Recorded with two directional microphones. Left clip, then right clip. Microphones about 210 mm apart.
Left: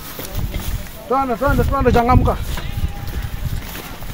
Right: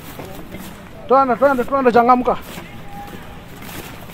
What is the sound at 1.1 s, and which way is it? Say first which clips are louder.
Speech: right 5 dB; centre (ahead or behind).